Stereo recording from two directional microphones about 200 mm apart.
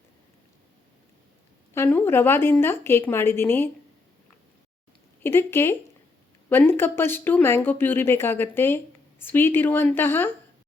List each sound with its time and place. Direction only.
1.7 s speech: 10° left (ahead or behind)
5.2 s speech: 10° left (ahead or behind)